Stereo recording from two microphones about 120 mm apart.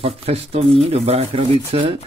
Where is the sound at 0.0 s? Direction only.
55° right (ahead or behind).